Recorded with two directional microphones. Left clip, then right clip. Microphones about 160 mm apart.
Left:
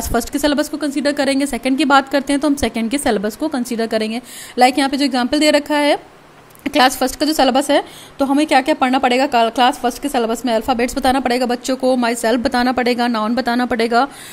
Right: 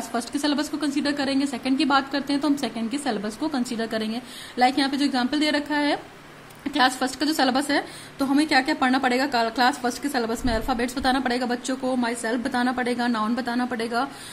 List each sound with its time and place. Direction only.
0.1 s a woman's voice: 40° left (ahead or behind)